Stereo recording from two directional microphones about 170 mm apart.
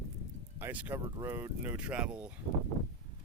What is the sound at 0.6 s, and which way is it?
Speech, 10° right (ahead or behind).